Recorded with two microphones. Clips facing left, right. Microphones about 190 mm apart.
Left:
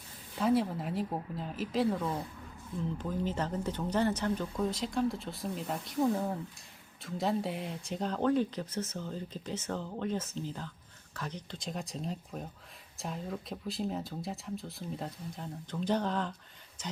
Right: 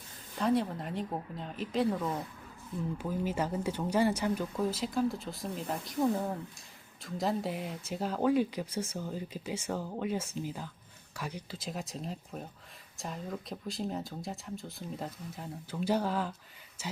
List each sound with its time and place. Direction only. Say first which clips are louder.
0.3 s speech: left 1 dB; 5° left (ahead or behind)